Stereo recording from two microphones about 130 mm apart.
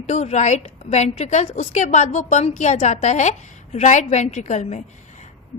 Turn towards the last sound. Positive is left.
turn(degrees=65)  # may be behind; listen again after turning